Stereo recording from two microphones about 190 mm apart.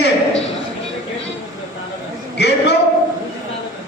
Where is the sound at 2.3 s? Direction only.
60° left (ahead or behind).